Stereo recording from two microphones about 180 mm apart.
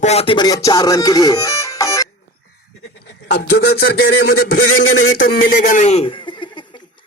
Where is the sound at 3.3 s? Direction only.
65° left (ahead or behind); by 6.8 s 25° left (ahead or behind).